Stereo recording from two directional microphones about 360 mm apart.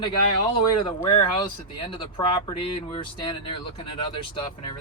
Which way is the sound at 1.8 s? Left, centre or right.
Centre.